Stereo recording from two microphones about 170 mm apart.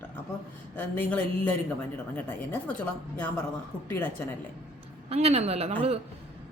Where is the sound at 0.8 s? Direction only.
10° left (ahead or behind).